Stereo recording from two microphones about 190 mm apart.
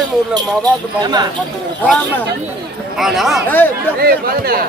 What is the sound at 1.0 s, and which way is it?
Speech, 20° right (ahead or behind).